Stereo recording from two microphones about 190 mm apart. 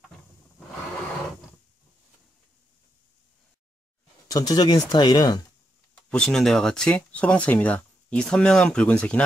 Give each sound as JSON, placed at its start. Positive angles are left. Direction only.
{"t": 4.3, "sound": "speech", "side_deg": 20}
{"t": 6.0, "sound": "speech", "side_deg": 5}